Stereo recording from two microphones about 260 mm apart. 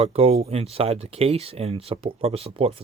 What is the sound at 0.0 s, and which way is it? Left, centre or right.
Speech, right.